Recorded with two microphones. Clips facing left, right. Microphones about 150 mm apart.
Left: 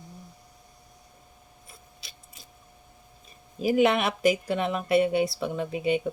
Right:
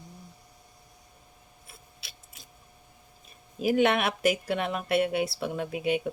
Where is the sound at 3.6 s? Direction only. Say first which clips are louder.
Left 2 dB; centre (ahead or behind).